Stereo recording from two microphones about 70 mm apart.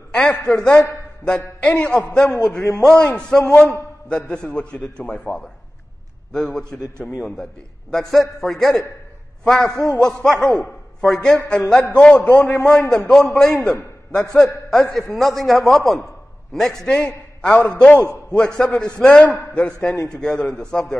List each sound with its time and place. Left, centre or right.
0.1 s a man's voice: centre
7.0 s a man's voice: centre